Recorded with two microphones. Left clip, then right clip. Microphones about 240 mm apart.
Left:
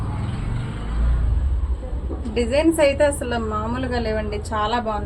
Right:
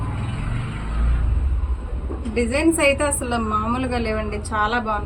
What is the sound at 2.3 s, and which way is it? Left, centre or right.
A woman's voice, centre.